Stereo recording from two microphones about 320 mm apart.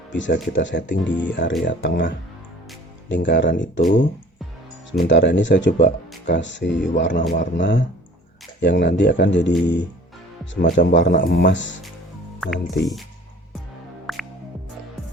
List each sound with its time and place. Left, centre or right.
0.1 s speech: left
12.4 s speech: centre
14.1 s music: centre